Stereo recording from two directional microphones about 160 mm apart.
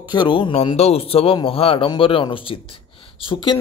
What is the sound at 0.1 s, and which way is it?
A man's voice, 30° left (ahead or behind).